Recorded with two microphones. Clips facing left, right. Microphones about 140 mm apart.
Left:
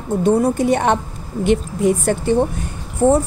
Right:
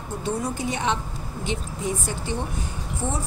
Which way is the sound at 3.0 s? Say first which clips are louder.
Left 16 dB; 50° left (ahead or behind).